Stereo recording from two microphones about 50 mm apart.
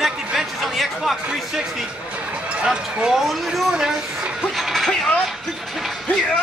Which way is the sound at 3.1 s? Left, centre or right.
Centre.